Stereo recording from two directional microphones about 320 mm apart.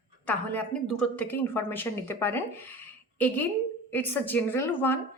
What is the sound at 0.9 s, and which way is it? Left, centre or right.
Speech, centre.